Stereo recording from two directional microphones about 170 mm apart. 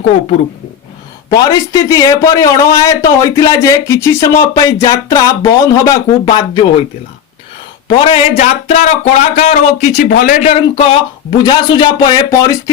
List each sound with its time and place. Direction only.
1.3 s a man's voice: 20° left (ahead or behind)
7.9 s speech: 30° left (ahead or behind); by 10.4 s 55° left (ahead or behind)
10.4 s a man's voice: 35° left (ahead or behind); by 12.7 s 20° left (ahead or behind)